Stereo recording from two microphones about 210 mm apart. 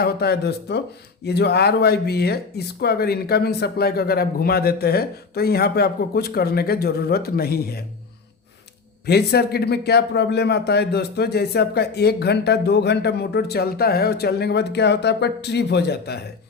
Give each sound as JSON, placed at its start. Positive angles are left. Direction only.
{"t": 0.0, "sound": "a man's voice", "side_deg": 50}
{"t": 9.0, "sound": "a man's voice", "side_deg": 50}